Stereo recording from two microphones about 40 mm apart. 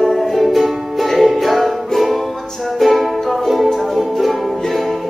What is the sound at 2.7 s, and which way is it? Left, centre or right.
Ukulele, centre.